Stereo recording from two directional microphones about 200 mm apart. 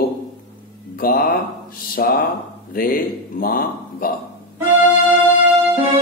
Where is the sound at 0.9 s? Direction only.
45° left (ahead or behind).